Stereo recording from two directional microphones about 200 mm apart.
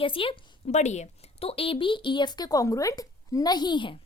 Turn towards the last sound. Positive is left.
turn(degrees=25)  # may be behind; listen again after turning